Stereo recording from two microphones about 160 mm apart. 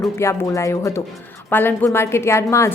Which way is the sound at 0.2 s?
20° left (ahead or behind).